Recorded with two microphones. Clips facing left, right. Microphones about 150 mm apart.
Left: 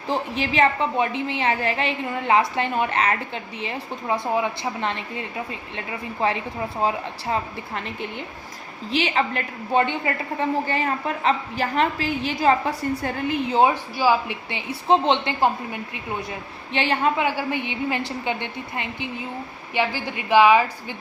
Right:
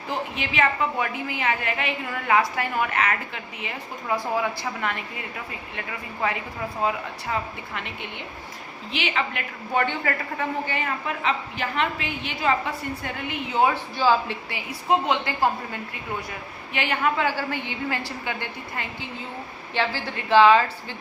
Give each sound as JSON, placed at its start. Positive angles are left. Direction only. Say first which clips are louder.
{"t": 0.1, "sound": "a woman's voice", "louder": "left 5 dB", "side_deg": 35}
{"t": 6.8, "sound": "a woman's voice", "louder": "left 2 dB", "side_deg": 35}
{"t": 8.9, "sound": "a woman's voice", "louder": "left 5 dB", "side_deg": 35}
{"t": 9.7, "sound": "a woman's voice", "louder": "left 3 dB", "side_deg": 20}
{"t": 10.7, "sound": "a woman's voice", "louder": "left 4 dB", "side_deg": 35}
{"t": 13.9, "sound": "a woman's voice", "louder": "left 1 dB", "side_deg": 15}
{"t": 14.5, "sound": "a woman's voice", "louder": "left 4 dB", "side_deg": 30}
{"t": 17.2, "sound": "a woman's voice", "louder": "left 2 dB", "side_deg": 20}